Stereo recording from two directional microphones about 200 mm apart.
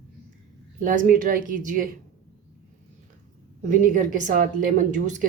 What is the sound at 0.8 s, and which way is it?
A woman's voice, 40° right (ahead or behind).